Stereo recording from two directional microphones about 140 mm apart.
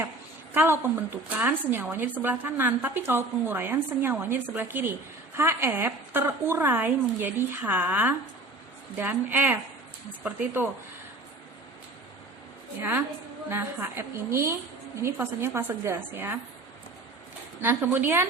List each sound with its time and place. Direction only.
0.5 s a woman's voice: 15° right (ahead or behind)
13.5 s a woman's voice: 15° right (ahead or behind)
17.6 s a woman's voice: 15° right (ahead or behind)